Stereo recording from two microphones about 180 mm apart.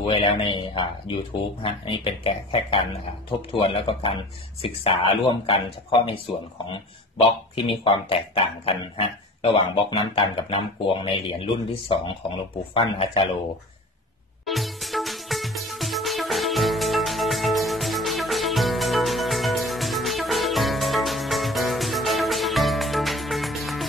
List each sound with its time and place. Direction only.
0.0 s speech: 30° left (ahead or behind)
12.7 s speech: 30° left (ahead or behind)
14.4 s music: centre (ahead or behind)